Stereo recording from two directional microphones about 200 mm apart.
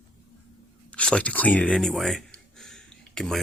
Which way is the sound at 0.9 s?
5° left (ahead or behind).